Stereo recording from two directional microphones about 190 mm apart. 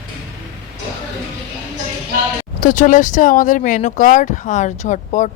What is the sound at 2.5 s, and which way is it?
Speech, 45° left (ahead or behind).